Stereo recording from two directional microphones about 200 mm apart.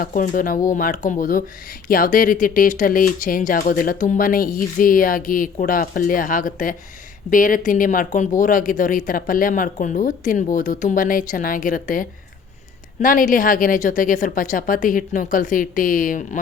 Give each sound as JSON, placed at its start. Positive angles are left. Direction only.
{"t": 0.0, "sound": "speech", "side_deg": 40}